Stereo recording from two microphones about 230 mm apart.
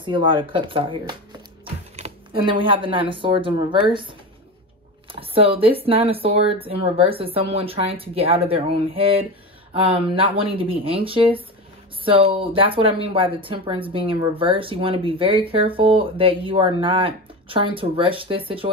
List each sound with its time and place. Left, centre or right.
0.0 s speech: right